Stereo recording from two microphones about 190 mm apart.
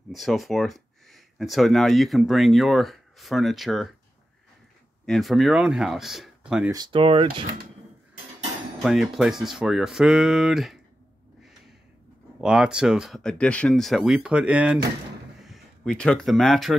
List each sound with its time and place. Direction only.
0.1 s speech: centre (ahead or behind)
5.0 s speech: centre (ahead or behind)
6.7 s speech: 25° right (ahead or behind)
8.8 s speech: centre (ahead or behind)
12.4 s speech: 5° right (ahead or behind)